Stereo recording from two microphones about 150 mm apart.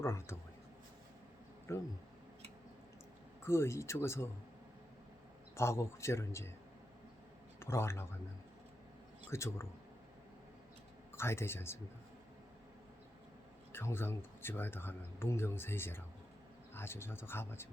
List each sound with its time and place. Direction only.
0.0 s speech: 15° left (ahead or behind)
1.7 s speech: 20° left (ahead or behind)
3.4 s speech: 20° left (ahead or behind)
5.5 s speech: 15° left (ahead or behind)
7.6 s speech: 15° left (ahead or behind)
9.3 s speech: 20° left (ahead or behind)
11.1 s speech: 15° left (ahead or behind)
13.7 s speech: 15° left (ahead or behind)